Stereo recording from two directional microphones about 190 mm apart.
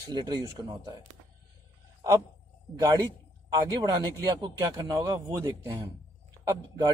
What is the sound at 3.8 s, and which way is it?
Speech, 20° right (ahead or behind).